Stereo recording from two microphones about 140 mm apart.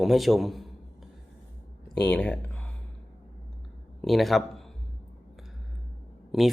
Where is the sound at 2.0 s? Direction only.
10° left (ahead or behind).